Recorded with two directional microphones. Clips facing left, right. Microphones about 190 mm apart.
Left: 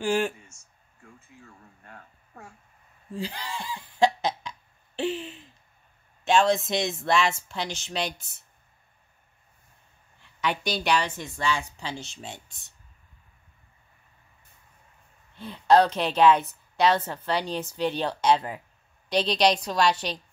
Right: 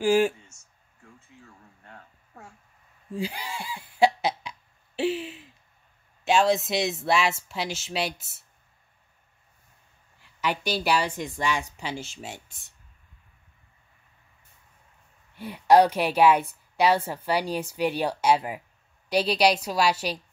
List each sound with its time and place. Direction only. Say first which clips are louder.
0.0 s a woman's voice: right 4 dB; 5° right (ahead or behind)
0.5 s a sound: left 1 dB; 20° right (ahead or behind)
3.2 s cough: right 1 dB; 10° right (ahead or behind)
6.2 s speech: even; 5° right (ahead or behind)
10.4 s a woman's voice: right 1 dB; centre (ahead or behind)
15.3 s a woman's voice: right 1 dB; 10° right (ahead or behind)